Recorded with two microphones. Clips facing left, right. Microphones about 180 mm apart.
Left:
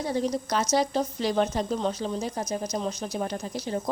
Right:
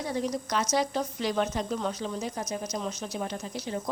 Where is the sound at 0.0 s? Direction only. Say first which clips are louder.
Left 3 dB; 30° left (ahead or behind).